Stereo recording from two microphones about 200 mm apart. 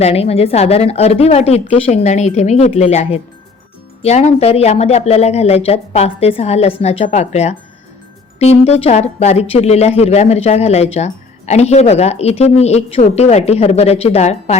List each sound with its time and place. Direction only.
0.0 s speech: 30° left (ahead or behind)